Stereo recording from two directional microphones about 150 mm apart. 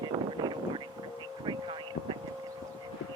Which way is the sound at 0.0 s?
30° right (ahead or behind).